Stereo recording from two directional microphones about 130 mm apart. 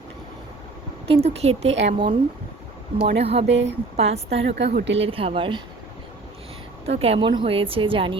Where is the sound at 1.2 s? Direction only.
55° right (ahead or behind).